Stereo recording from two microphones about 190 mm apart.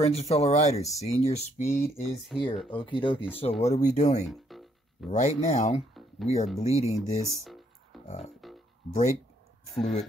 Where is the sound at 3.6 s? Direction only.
40° left (ahead or behind).